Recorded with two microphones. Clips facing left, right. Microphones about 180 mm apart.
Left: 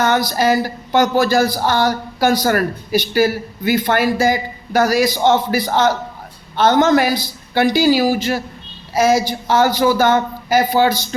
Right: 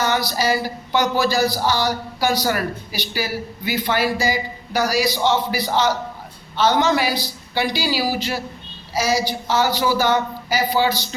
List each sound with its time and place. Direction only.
0.0 s speech: 50° left (ahead or behind)